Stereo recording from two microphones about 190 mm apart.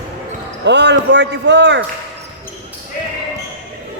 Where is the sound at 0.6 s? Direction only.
65° right (ahead or behind).